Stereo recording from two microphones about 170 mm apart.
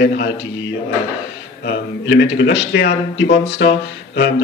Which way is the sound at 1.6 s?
90° left.